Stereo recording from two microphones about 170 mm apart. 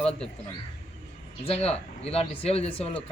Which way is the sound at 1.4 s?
35° left (ahead or behind).